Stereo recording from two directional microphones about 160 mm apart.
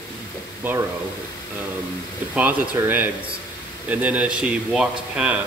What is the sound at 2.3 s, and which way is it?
Speech, 10° right (ahead or behind).